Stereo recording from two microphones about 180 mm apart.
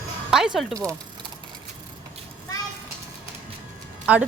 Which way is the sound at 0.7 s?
20° right (ahead or behind).